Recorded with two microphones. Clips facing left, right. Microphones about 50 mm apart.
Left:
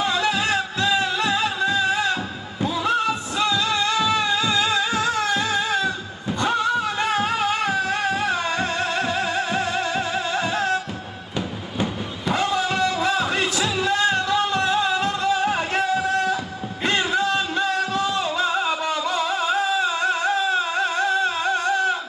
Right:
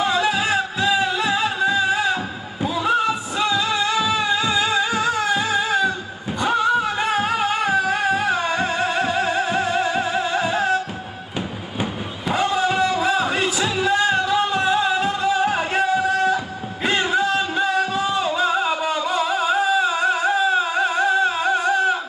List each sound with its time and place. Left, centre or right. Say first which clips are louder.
0.0 s music: right 2 dB; centre
11.8 s a sound: even; centre
17.1 s music: right 2 dB; centre